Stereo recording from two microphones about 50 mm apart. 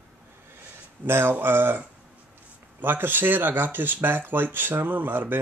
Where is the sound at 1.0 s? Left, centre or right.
Right.